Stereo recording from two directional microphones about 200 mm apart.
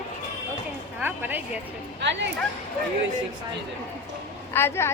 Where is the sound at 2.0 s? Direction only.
60° right (ahead or behind).